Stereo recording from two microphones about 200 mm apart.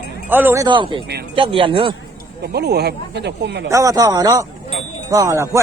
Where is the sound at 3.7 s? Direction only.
15° right (ahead or behind).